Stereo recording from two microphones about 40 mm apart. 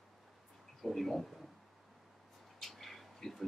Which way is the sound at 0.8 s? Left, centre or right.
Centre.